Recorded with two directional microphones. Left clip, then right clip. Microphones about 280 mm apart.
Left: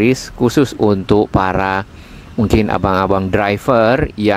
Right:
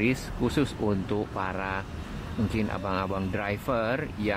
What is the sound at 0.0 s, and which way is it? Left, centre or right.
Speech, left.